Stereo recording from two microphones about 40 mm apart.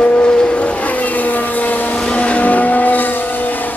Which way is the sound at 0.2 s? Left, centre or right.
Left.